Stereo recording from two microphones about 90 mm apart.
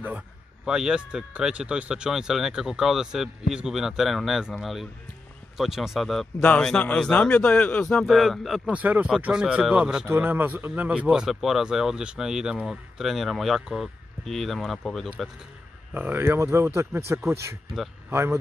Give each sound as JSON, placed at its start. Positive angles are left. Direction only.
{"t": 0.7, "sound": "a man's voice", "side_deg": -10}
{"t": 8.8, "sound": "speech", "side_deg": -20}
{"t": 10.0, "sound": "speech", "side_deg": -25}
{"t": 15.9, "sound": "speech", "side_deg": -20}